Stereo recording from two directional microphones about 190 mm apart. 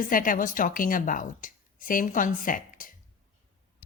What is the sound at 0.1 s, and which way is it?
A woman's voice, 45° left (ahead or behind).